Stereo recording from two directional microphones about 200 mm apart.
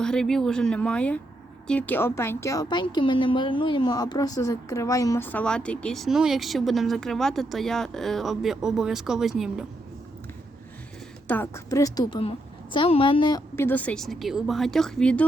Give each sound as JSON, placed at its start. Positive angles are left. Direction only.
{"t": 0.0, "sound": "a woman's voice", "side_deg": 5}
{"t": 11.3, "sound": "a woman's voice", "side_deg": 10}